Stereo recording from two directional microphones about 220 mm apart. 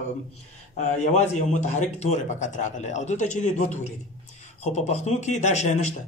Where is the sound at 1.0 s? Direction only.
30° left (ahead or behind).